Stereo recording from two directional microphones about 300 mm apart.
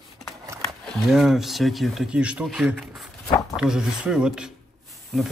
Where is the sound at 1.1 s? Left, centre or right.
Centre.